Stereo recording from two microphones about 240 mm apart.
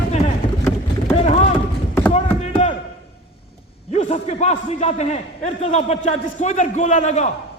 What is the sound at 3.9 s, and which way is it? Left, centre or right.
A man's voice, left.